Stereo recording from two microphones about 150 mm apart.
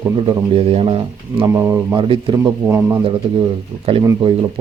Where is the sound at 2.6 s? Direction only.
20° right (ahead or behind).